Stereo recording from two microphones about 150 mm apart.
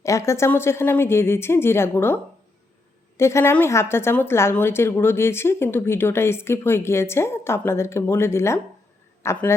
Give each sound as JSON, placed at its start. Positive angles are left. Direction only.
{"t": 0.0, "sound": "a woman's voice", "side_deg": 20}
{"t": 3.2, "sound": "a woman's voice", "side_deg": 20}